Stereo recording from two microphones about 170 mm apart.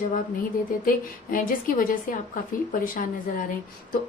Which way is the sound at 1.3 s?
55° left (ahead or behind).